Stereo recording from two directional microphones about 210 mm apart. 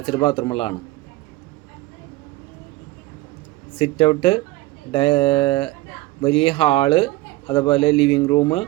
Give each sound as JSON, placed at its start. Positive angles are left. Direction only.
{"t": 0.0, "sound": "speech", "side_deg": 25}
{"t": 3.8, "sound": "speech", "side_deg": 25}